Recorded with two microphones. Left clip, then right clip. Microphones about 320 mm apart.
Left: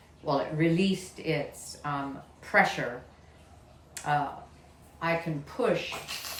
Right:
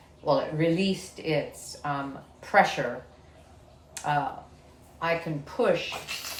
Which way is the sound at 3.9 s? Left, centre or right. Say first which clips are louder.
Right 1 dB; centre.